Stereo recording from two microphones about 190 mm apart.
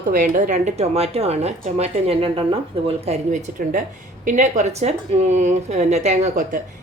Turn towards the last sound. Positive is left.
turn(degrees=-40)  # may be behind; listen again after turning